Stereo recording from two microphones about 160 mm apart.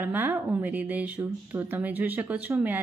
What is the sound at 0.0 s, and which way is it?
A woman's voice, 10° right (ahead or behind).